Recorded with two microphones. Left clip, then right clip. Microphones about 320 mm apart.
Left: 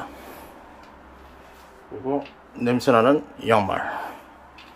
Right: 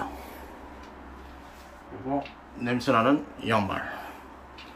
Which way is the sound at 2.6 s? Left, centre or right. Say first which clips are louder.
Left 6 dB; left.